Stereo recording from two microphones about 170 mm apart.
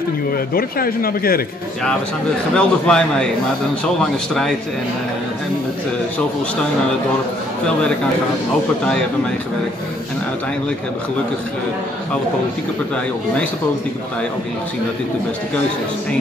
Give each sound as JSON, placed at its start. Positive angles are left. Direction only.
{"t": 0.6, "sound": "speech", "side_deg": 60}
{"t": 2.5, "sound": "a man's voice", "side_deg": 5}